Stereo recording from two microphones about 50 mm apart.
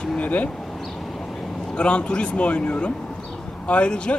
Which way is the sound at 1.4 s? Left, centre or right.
Centre.